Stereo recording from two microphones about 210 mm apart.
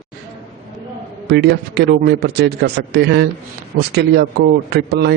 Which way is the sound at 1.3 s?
50° right (ahead or behind).